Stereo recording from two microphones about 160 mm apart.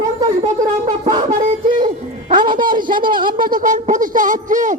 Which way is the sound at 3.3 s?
60° right (ahead or behind).